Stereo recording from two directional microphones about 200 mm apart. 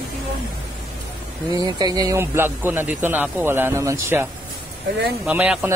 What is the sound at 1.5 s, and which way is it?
A man's voice, 20° right (ahead or behind).